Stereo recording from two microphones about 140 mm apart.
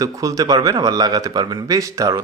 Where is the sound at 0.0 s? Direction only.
25° right (ahead or behind).